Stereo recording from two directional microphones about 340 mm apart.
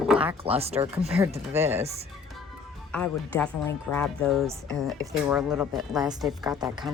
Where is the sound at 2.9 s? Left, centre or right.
Centre.